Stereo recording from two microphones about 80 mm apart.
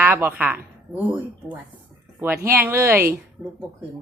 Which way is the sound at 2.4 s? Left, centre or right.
Right.